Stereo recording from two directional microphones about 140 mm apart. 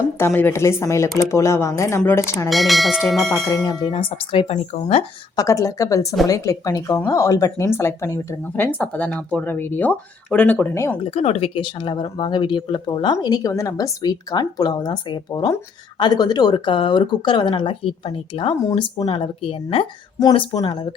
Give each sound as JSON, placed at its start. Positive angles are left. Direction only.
{"t": 0.2, "sound": "speech", "side_deg": 15}
{"t": 2.5, "sound": "speech", "side_deg": 0}
{"t": 3.5, "sound": "speech", "side_deg": 30}
{"t": 5.4, "sound": "speech", "side_deg": 20}
{"t": 11.1, "sound": "speech", "side_deg": 45}